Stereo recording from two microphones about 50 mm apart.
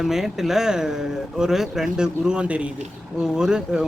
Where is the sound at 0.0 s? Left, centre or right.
Centre.